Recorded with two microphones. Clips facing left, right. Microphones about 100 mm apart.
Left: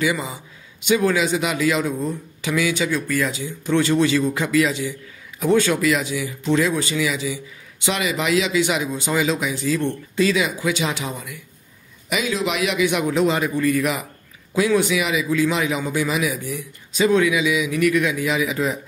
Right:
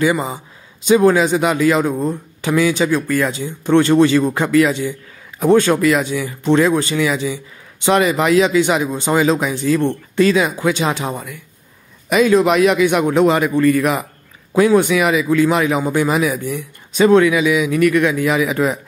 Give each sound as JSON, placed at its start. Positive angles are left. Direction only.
{"t": 0.0, "sound": "a man's voice", "side_deg": -40}
{"t": 13.7, "sound": "a man's voice", "side_deg": -45}